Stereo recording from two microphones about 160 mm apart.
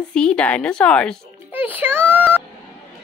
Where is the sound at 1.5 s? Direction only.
10° right (ahead or behind).